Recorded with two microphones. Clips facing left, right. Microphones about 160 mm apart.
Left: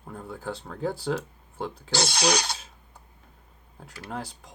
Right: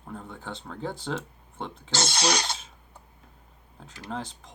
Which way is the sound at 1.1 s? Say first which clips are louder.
Left 4 dB; 25° right (ahead or behind).